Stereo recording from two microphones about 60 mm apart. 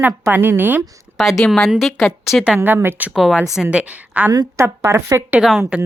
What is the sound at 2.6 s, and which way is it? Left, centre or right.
Speech, right.